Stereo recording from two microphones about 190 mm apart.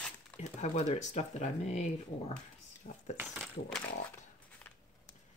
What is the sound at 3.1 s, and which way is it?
Speech, 10° right (ahead or behind).